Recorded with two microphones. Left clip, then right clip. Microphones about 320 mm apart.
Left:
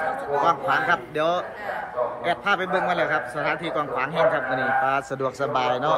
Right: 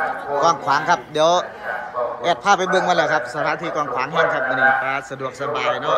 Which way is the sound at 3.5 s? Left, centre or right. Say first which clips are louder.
Right 2 dB; centre.